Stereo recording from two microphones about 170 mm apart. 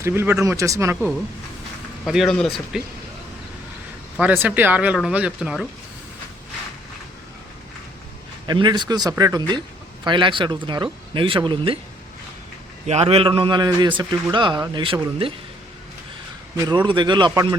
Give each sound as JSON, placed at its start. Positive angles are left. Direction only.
{"t": 0.0, "sound": "speech", "side_deg": -15}
{"t": 2.0, "sound": "speech", "side_deg": 0}
{"t": 4.2, "sound": "speech", "side_deg": -10}
{"t": 8.4, "sound": "a man's voice", "side_deg": -25}
{"t": 12.9, "sound": "a man's voice", "side_deg": -35}
{"t": 16.6, "sound": "a man's voice", "side_deg": -25}